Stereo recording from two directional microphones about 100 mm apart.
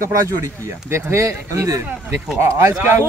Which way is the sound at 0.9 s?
30° right (ahead or behind).